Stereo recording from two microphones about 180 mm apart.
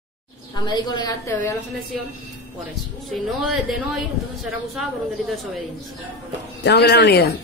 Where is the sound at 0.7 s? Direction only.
25° left (ahead or behind).